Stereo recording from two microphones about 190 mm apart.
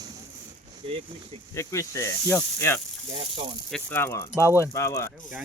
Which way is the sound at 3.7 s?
10° left (ahead or behind).